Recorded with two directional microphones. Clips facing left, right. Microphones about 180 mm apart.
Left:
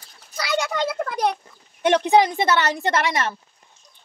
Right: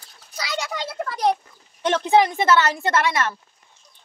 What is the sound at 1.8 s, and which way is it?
A woman's voice, 15° left (ahead or behind).